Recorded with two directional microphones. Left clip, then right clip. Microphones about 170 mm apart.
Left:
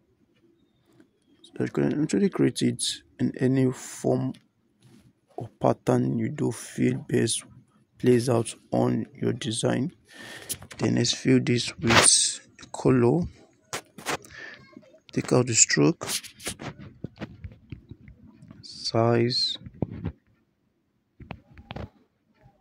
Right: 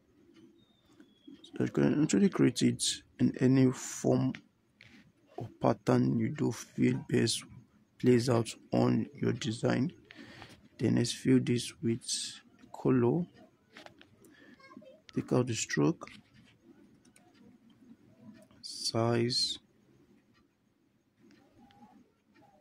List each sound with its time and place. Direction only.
1.4 s speech: 10° left (ahead or behind)
5.4 s speech: 20° left (ahead or behind)
15.1 s speech: 30° left (ahead or behind)
18.6 s speech: 25° left (ahead or behind)